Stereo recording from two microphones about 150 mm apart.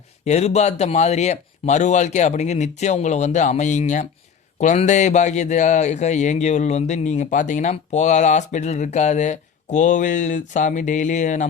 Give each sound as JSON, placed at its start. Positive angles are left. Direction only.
{"t": 0.3, "sound": "a man's voice", "side_deg": 45}